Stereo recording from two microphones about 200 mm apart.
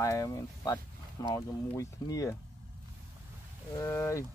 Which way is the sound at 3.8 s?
15° left (ahead or behind).